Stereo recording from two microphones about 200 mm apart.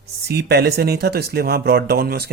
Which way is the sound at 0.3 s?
55° right (ahead or behind).